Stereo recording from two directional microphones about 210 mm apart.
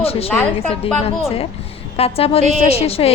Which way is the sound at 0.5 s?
30° left (ahead or behind).